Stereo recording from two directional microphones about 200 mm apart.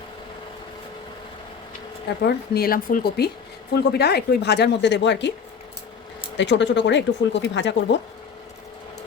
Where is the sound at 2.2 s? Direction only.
50° left (ahead or behind).